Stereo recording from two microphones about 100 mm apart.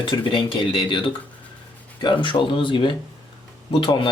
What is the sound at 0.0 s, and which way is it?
Speech, 55° left (ahead or behind).